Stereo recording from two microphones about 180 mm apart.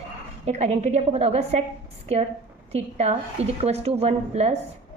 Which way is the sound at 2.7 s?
35° right (ahead or behind).